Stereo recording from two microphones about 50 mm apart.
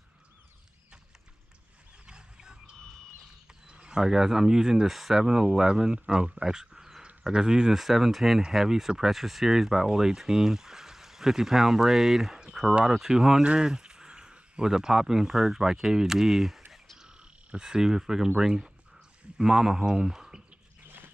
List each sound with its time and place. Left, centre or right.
2.0 s wild animals: centre
3.6 s speech: centre
12.4 s a sound: centre
12.8 s speech: centre
13.7 s a sound: centre
14.7 s speech: centre
17.2 s cricket: centre
18.4 s speech: centre